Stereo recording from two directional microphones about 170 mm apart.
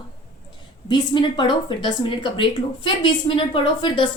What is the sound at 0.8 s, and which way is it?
Speech, 25° left (ahead or behind).